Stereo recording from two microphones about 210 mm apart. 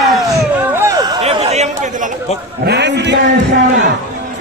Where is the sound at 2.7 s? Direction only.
55° right (ahead or behind).